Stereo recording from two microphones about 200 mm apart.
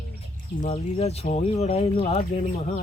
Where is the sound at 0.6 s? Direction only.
35° left (ahead or behind).